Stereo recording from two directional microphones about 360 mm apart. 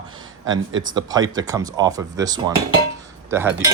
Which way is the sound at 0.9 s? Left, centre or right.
Centre.